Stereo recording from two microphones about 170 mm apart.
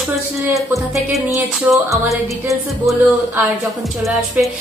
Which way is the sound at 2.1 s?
Centre (ahead or behind).